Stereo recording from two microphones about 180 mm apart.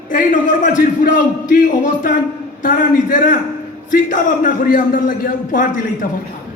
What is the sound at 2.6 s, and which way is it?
A man's voice, 50° left (ahead or behind).